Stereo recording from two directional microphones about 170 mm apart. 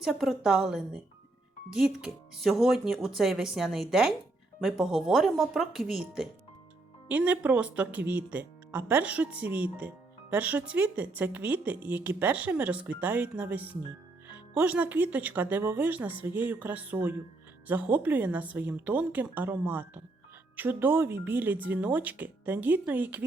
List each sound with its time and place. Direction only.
0.0 s speech: centre (ahead or behind)